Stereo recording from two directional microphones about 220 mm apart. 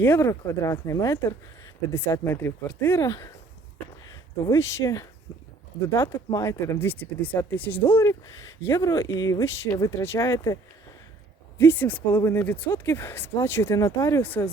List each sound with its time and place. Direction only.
0.0 s speech: 10° left (ahead or behind)
4.4 s speech: 15° left (ahead or behind)
11.6 s speech: 10° left (ahead or behind)